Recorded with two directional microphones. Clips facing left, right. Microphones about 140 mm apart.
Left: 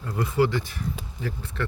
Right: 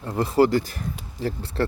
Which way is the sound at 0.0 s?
30° right (ahead or behind).